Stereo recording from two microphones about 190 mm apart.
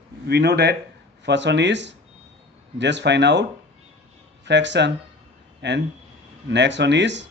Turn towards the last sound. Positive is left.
turn(degrees=-70)  # may be behind; listen again after turning